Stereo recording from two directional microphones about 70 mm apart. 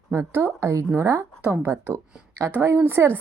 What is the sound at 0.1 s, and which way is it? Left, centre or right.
A woman's voice, right.